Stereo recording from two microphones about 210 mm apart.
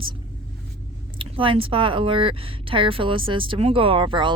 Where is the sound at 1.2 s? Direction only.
25° right (ahead or behind).